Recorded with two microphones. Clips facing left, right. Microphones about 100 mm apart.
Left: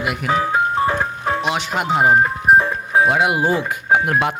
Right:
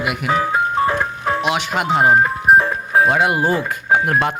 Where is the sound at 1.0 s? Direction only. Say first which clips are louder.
Right 1 dB; centre (ahead or behind).